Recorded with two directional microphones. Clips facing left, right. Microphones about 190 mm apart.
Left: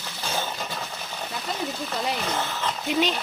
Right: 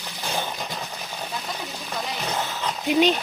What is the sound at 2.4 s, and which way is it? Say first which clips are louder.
Speech: right 1 dB; 15° right (ahead or behind).